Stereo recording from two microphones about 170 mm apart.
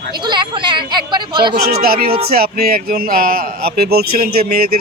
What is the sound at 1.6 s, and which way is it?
Music, 65° right (ahead or behind).